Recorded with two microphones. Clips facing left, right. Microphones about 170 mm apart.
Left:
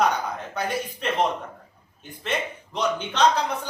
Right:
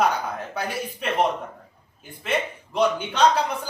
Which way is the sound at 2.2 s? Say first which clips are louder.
Right 2 dB; 5° right (ahead or behind).